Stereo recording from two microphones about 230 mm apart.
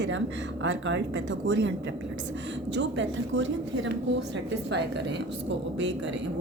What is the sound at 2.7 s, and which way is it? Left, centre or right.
Speech, right.